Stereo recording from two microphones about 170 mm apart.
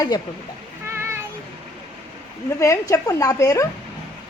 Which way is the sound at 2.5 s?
15° left (ahead or behind).